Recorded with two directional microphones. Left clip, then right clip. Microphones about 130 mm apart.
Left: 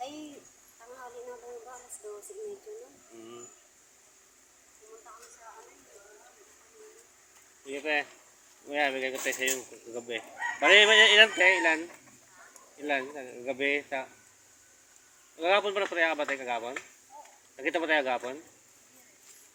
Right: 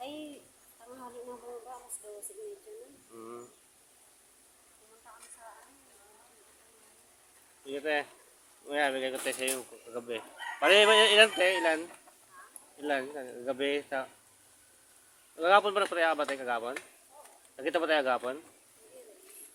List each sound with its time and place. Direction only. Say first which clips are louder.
7.7 s speech: left 2 dB; 35° right (ahead or behind)
12.8 s speech: left 1 dB; 30° right (ahead or behind)
15.4 s speech: right 2 dB; 35° right (ahead or behind)